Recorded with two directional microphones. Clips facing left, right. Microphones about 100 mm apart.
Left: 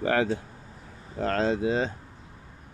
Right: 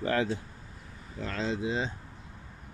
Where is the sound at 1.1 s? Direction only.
50° left (ahead or behind).